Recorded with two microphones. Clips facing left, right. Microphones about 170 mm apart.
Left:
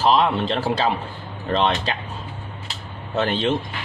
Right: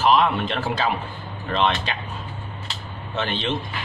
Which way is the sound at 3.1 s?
40° left (ahead or behind).